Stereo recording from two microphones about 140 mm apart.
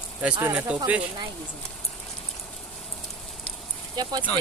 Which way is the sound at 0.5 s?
10° right (ahead or behind).